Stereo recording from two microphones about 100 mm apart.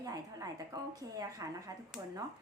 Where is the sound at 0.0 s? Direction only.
35° right (ahead or behind).